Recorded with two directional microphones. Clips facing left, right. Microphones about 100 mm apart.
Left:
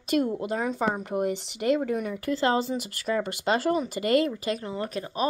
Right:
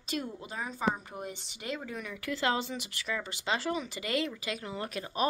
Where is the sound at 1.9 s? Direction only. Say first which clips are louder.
Left 9 dB; 45° left (ahead or behind).